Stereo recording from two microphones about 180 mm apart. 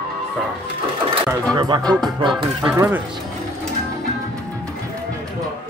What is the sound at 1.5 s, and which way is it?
Speech, 25° right (ahead or behind).